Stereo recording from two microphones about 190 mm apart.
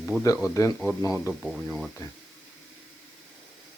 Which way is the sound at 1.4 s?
Centre (ahead or behind).